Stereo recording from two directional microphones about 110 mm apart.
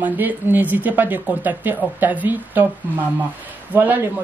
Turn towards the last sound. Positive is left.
turn(degrees=-15)  # may be behind; listen again after turning